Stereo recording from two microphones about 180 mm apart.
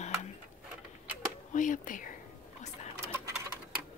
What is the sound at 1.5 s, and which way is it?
Speech, 45° left (ahead or behind).